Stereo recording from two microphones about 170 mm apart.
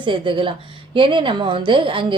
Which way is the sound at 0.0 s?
30° right (ahead or behind).